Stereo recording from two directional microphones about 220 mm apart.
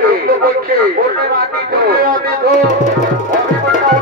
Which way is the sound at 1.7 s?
45° right (ahead or behind).